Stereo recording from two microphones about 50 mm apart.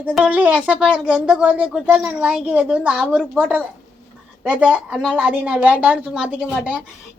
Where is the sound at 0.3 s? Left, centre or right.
Right.